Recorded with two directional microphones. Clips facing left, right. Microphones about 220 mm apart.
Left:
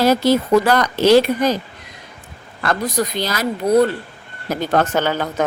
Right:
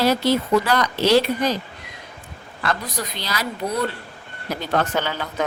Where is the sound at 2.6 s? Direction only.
45° left (ahead or behind).